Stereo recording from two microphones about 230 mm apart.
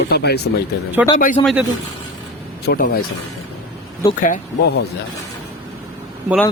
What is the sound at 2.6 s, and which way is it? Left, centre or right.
Speech, left.